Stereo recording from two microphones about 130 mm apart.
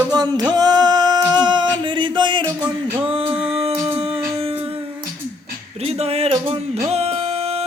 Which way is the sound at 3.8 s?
50° right (ahead or behind).